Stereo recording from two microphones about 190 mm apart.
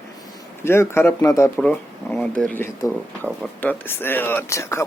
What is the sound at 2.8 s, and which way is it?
Speech, 20° left (ahead or behind).